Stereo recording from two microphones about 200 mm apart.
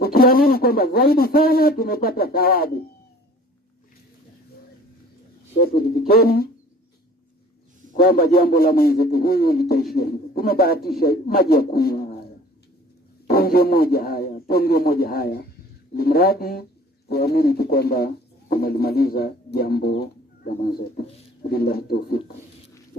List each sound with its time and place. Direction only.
0.0 s speech: 50° left (ahead or behind)
5.5 s speech: 50° left (ahead or behind)
7.9 s speech: 50° left (ahead or behind)
13.2 s speech: 50° left (ahead or behind)